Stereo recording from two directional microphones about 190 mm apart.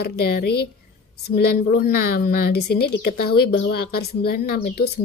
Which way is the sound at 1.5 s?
50° left (ahead or behind).